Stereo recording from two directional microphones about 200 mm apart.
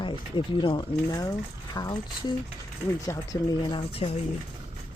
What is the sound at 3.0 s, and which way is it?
Speech, 20° left (ahead or behind).